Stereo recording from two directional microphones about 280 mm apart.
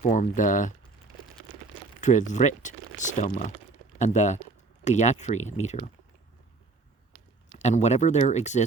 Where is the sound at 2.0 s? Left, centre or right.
Left.